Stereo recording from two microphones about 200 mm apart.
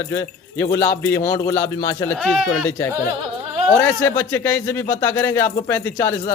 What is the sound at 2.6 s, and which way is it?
Speech, 10° left (ahead or behind).